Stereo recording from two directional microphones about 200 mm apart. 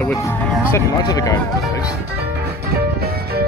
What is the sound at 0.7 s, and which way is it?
Speech, 15° left (ahead or behind).